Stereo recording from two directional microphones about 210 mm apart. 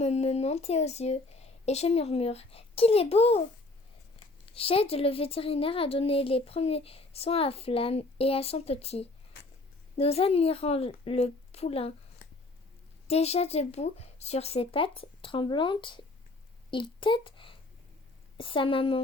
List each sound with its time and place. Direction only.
0.0 s a woman's voice: 30° left (ahead or behind)
4.5 s a woman's voice: 25° left (ahead or behind)
13.1 s a woman's voice: 30° left (ahead or behind)